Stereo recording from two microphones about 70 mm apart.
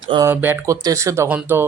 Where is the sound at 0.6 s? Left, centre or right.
Right.